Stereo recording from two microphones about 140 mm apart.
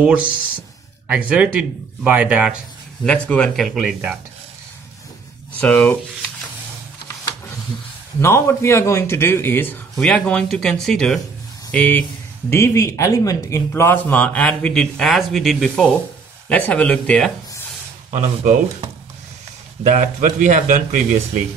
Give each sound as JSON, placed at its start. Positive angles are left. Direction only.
{"t": 0.0, "sound": "speech", "side_deg": -10}
{"t": 3.0, "sound": "speech", "side_deg": 10}
{"t": 5.6, "sound": "a man's voice", "side_deg": 10}
{"t": 8.2, "sound": "a man's voice", "side_deg": 20}
{"t": 18.1, "sound": "speech", "side_deg": -65}
{"t": 19.8, "sound": "speech", "side_deg": -65}